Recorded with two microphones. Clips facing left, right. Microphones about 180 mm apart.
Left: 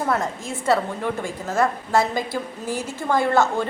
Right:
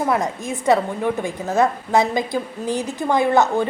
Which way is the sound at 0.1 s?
15° right (ahead or behind).